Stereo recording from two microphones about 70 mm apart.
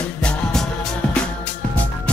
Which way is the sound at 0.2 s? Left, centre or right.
Centre.